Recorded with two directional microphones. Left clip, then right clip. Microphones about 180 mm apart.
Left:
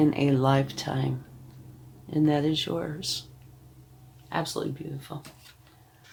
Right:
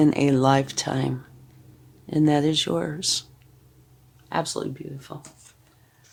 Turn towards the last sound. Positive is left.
turn(degrees=-55)  # may be behind; listen again after turning